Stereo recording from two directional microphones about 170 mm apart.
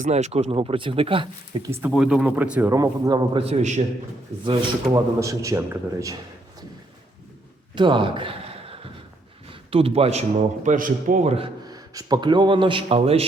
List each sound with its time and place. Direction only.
0.0 s a man's voice: 40° right (ahead or behind)
1.9 s speech: 5° right (ahead or behind); by 3.4 s 20° right (ahead or behind)
3.4 s a man's voice: 40° right (ahead or behind)
4.9 s a man's voice: 20° right (ahead or behind)
7.8 s a sound: 30° right (ahead or behind)
9.5 s a man's voice: 35° right (ahead or behind)